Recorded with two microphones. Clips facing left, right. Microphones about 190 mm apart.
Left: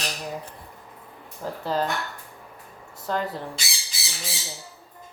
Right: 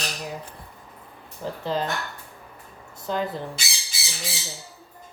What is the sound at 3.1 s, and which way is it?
Speech, centre (ahead or behind).